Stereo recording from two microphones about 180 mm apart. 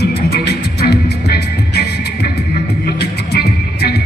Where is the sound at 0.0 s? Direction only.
65° left (ahead or behind).